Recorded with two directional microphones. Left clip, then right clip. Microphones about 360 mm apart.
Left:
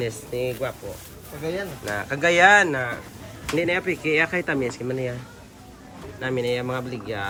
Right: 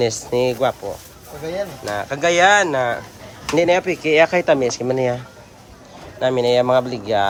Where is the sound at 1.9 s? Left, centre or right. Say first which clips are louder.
Right 3 dB; centre.